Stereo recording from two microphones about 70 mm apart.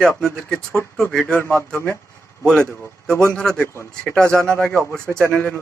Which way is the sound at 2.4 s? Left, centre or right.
Centre.